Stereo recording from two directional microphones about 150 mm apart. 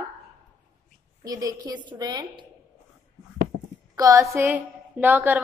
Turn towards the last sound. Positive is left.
turn(degrees=-10)  # may be behind; listen again after turning